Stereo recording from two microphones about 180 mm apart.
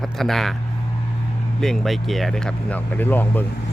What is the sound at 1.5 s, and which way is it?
Speech, centre (ahead or behind).